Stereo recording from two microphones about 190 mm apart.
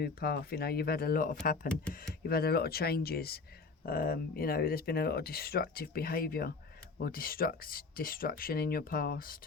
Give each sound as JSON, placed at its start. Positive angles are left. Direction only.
{"t": 0.0, "sound": "speech", "side_deg": 55}
{"t": 1.6, "sound": "speech", "side_deg": 5}
{"t": 1.9, "sound": "speech", "side_deg": 50}